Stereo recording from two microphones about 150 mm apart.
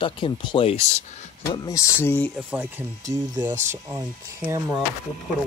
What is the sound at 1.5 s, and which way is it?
Speech, 20° left (ahead or behind).